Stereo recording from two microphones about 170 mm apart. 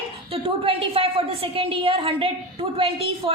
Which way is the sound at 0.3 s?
35° right (ahead or behind).